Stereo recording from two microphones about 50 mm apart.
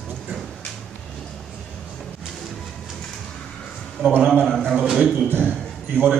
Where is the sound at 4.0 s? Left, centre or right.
Right.